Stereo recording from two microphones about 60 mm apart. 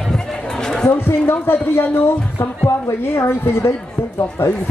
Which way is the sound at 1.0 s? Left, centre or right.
Left.